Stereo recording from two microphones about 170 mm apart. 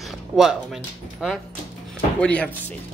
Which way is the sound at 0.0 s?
Centre (ahead or behind).